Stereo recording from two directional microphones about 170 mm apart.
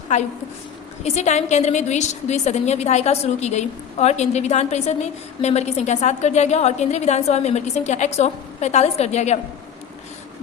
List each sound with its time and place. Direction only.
1.0 s a woman's voice: 40° left (ahead or behind)